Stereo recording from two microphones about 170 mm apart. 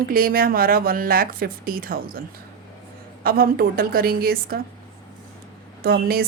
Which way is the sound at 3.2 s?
60° right (ahead or behind).